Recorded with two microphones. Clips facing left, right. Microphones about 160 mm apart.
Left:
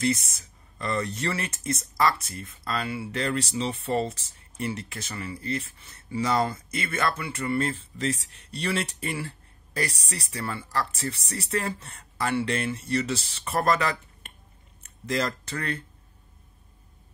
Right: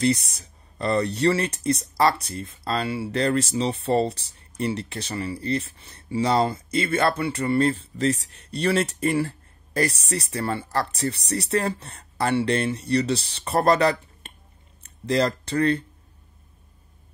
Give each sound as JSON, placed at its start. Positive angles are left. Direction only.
{"t": 0.0, "sound": "speech", "side_deg": -35}